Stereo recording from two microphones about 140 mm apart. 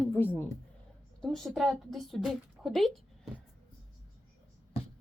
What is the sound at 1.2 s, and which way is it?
Speech, centre (ahead or behind).